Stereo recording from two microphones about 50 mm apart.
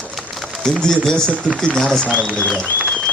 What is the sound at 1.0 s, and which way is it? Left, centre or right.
Speech, centre.